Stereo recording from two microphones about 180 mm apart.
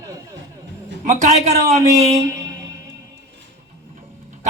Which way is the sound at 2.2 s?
20° right (ahead or behind).